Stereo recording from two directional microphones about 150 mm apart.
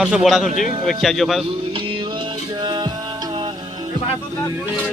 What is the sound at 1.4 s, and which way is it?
Music, 35° right (ahead or behind).